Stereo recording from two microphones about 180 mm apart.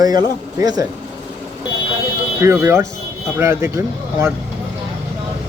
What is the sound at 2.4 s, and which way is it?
Speech, 15° right (ahead or behind).